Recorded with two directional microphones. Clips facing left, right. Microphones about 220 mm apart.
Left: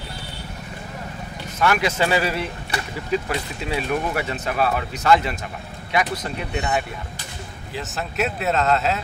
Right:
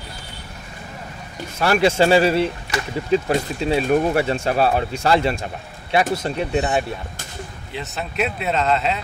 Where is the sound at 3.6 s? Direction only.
30° right (ahead or behind).